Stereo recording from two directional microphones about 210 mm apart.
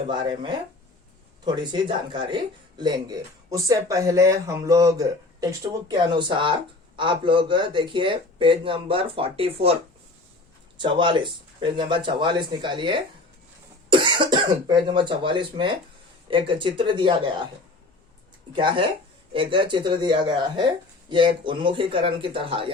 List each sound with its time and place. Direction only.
0.1 s speech: 20° right (ahead or behind)
10.8 s speech: 20° right (ahead or behind)
18.5 s speech: 25° right (ahead or behind)